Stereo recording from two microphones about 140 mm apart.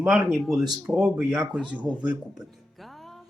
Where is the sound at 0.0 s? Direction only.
5° right (ahead or behind).